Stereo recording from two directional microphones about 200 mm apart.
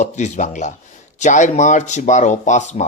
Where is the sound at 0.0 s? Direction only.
35° left (ahead or behind).